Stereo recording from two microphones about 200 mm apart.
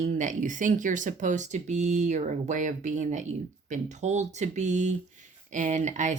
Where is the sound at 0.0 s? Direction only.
40° right (ahead or behind).